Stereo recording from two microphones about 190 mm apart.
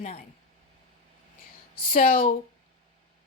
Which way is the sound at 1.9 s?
50° left (ahead or behind).